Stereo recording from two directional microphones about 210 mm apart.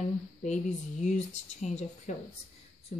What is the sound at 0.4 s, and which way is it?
Speech, 35° left (ahead or behind).